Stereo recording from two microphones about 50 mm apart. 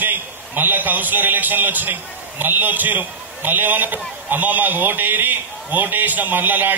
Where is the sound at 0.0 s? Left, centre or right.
Right.